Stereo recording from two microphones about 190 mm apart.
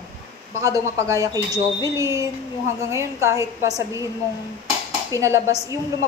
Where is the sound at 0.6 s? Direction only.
15° right (ahead or behind).